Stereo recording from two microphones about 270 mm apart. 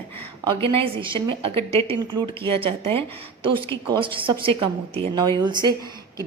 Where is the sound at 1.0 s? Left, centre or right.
Centre.